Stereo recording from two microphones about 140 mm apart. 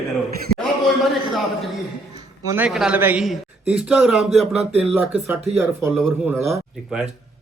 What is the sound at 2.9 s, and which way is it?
Speech, 15° right (ahead or behind).